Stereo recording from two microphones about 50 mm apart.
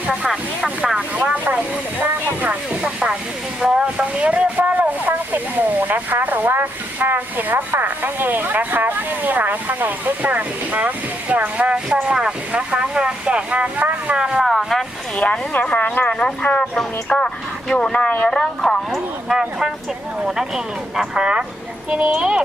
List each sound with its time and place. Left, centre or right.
0.1 s speech: centre
0.9 s speech: right
2.8 s speech: centre
14.2 s speech: centre
14.4 s speech: centre
15.1 s speech: left
16.1 s speech: centre
19.3 s speech: centre; by 22.1 s right
22.1 s speech: centre